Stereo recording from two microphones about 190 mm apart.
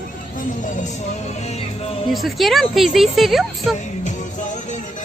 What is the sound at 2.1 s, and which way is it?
A woman's voice, centre (ahead or behind).